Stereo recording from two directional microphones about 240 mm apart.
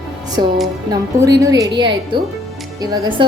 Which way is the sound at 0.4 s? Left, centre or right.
Centre.